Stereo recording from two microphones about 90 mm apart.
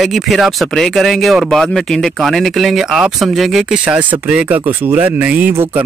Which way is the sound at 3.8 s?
15° right (ahead or behind).